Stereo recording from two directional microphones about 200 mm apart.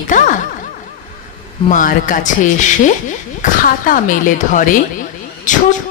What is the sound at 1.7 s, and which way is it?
A woman's voice, 40° left (ahead or behind).